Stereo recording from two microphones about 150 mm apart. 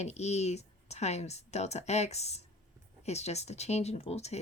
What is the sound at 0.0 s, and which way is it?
Speech, 45° left (ahead or behind).